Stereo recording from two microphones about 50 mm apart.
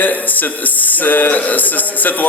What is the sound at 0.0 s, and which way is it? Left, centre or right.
A man's voice, left.